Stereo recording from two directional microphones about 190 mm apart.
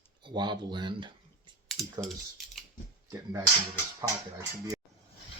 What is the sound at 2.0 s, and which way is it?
Typing, centre (ahead or behind).